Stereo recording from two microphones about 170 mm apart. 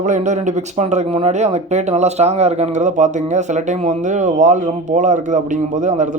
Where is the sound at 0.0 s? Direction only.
45° right (ahead or behind).